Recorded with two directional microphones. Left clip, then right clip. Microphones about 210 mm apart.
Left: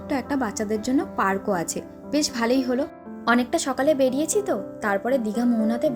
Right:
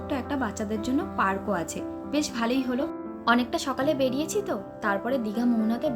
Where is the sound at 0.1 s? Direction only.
25° left (ahead or behind).